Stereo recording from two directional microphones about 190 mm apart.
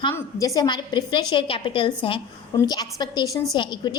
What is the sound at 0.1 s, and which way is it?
A woman's voice, 20° left (ahead or behind).